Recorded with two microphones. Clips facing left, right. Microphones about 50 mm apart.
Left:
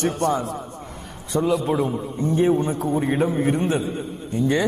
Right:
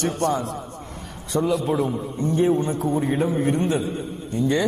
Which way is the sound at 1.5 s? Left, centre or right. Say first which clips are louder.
Left 2 dB; centre.